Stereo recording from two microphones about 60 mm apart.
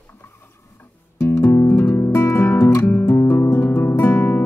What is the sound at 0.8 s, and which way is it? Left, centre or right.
Music, left.